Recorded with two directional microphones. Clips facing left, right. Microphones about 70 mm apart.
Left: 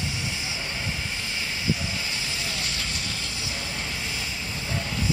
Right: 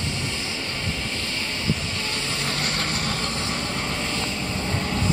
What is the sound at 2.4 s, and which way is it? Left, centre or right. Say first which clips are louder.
Vehicle: right 5 dB; right.